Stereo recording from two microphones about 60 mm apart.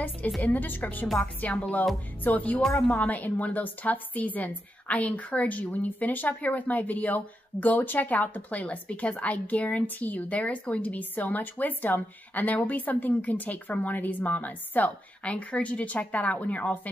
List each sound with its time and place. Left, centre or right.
0.4 s a woman's voice: left